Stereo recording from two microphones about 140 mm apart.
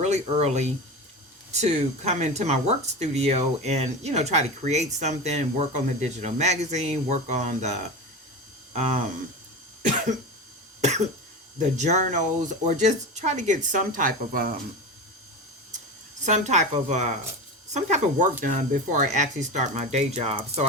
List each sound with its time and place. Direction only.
0.0 s speech: 55° right (ahead or behind)
8.7 s a sound: 50° right (ahead or behind)
10.8 s cough: 55° right (ahead or behind)
11.8 s speech: 55° right (ahead or behind)
13.7 s speech: 70° right (ahead or behind)
16.2 s speech: 55° right (ahead or behind)